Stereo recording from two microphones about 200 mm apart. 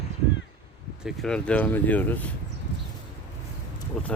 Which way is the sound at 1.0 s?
5° left (ahead or behind).